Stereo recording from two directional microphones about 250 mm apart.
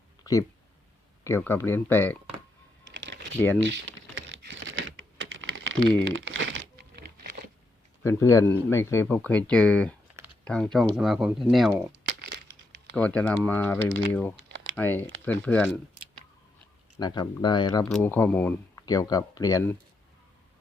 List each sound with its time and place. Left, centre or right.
1.2 s speech: centre
2.9 s typing: right
3.3 s speech: centre
3.7 s typing: right
6.1 s crumpling: right
8.0 s speech: centre
12.2 s crushing: right
13.0 s speech: centre
17.0 s speech: centre